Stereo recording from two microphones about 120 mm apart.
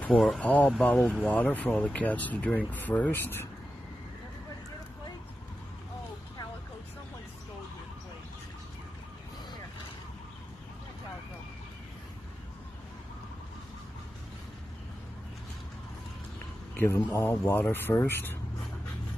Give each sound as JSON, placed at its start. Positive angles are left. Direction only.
{"t": 0.1, "sound": "speech", "side_deg": 0}
{"t": 0.4, "sound": "speech", "side_deg": 10}
{"t": 16.7, "sound": "speech", "side_deg": 20}